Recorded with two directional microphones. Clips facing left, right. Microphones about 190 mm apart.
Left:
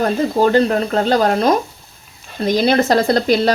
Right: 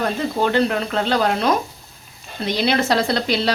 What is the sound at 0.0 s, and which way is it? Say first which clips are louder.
Speech: left 5 dB; 40° left (ahead or behind).